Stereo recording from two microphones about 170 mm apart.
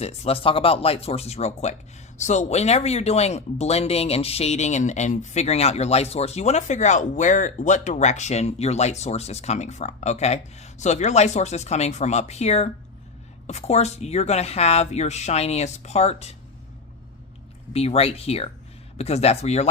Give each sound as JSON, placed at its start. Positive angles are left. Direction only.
{"t": 0.0, "sound": "speech", "side_deg": 35}
{"t": 17.7, "sound": "speech", "side_deg": 35}